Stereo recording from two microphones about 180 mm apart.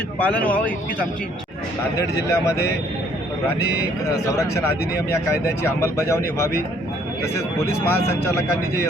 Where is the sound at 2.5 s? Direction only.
15° left (ahead or behind).